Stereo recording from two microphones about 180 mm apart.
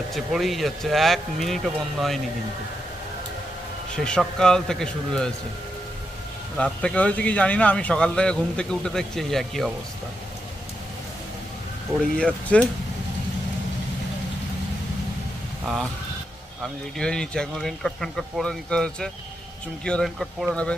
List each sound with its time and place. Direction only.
0.1 s speech: centre (ahead or behind)
3.9 s speech: 5° left (ahead or behind)
6.6 s speech: 5° left (ahead or behind)
12.1 s speech: 5° left (ahead or behind)
15.6 s speech: centre (ahead or behind)
17.0 s speech: 5° left (ahead or behind)